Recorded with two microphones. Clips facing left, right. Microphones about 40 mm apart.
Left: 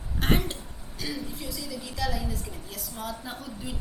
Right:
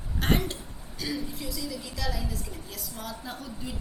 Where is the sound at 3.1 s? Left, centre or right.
Centre.